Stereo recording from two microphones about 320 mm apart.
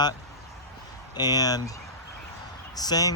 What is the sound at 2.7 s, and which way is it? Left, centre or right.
Speech, centre.